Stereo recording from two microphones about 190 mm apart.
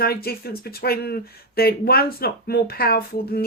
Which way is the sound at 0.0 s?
55° left (ahead or behind).